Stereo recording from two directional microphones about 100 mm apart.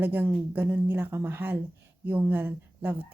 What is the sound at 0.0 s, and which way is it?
A woman's voice, 20° right (ahead or behind).